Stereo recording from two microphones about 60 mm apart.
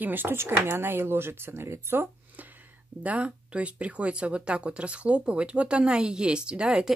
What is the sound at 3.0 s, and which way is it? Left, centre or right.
Speech, right.